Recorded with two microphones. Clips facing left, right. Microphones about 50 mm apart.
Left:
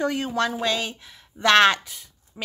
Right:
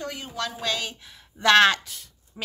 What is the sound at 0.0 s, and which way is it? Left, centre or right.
Speech, left.